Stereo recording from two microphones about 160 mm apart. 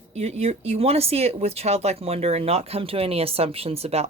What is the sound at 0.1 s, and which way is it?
Speech, 40° right (ahead or behind).